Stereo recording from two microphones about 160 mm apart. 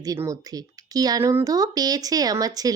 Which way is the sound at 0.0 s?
20° right (ahead or behind).